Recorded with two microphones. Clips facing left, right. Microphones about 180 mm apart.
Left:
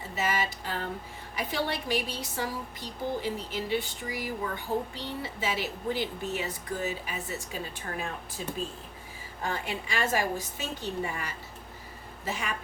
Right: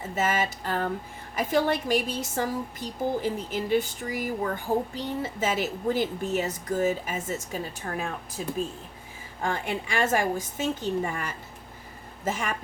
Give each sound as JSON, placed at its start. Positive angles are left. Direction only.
{"t": 0.2, "sound": "a woman's voice", "side_deg": -50}
{"t": 9.4, "sound": "a woman's voice", "side_deg": -50}